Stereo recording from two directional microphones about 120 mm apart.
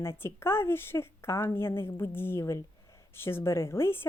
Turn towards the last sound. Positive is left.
turn(degrees=20)  # may be behind; listen again after turning